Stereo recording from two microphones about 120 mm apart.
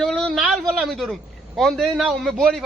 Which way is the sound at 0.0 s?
5° left (ahead or behind).